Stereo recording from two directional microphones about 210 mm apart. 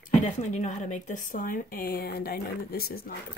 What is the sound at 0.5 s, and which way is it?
Speech, 35° left (ahead or behind).